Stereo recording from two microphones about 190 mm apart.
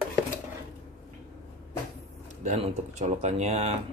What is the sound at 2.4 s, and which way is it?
Speech, 35° right (ahead or behind).